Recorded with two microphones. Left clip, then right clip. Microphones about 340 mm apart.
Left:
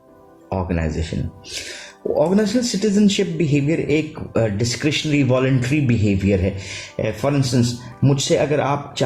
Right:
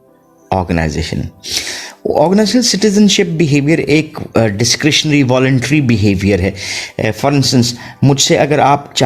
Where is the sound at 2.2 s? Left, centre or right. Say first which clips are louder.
Right 7 dB; right.